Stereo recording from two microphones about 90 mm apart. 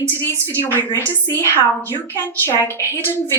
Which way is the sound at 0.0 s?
30° right (ahead or behind).